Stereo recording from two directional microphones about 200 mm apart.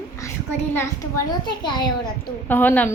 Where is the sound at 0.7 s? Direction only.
15° left (ahead or behind).